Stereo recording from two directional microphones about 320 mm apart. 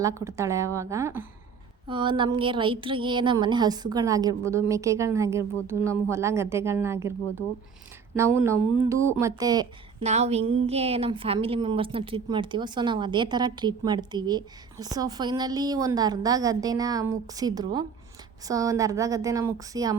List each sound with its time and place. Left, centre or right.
0.0 s a woman's voice: centre